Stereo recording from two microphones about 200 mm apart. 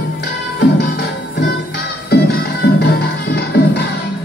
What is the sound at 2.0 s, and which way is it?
Music, 55° left (ahead or behind).